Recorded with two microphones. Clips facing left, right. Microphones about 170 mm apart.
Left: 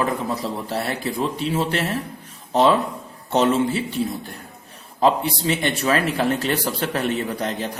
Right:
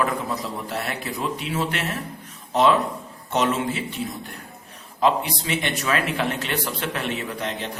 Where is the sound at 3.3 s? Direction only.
35° left (ahead or behind).